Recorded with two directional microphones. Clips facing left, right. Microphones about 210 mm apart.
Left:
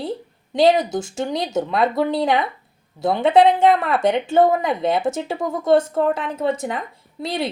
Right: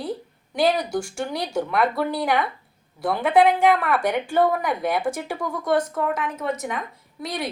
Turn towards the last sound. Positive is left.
turn(degrees=25)  # may be behind; listen again after turning